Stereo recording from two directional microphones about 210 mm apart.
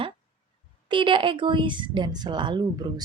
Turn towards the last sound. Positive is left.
turn(degrees=-20)  # may be behind; listen again after turning